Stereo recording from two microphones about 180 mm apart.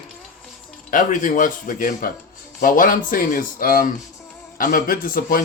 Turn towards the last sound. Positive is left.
turn(degrees=50)  # may be behind; listen again after turning